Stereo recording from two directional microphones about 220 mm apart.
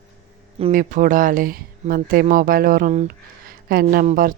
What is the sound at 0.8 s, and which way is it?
Speech, 35° right (ahead or behind).